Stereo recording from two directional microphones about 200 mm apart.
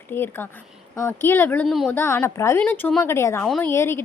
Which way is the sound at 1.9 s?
10° left (ahead or behind).